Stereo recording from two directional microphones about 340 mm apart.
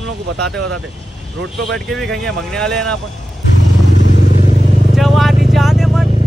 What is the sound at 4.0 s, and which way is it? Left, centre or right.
Vehicle, left.